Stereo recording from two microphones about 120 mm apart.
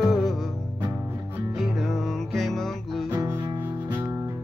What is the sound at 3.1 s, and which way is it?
Music, 30° right (ahead or behind).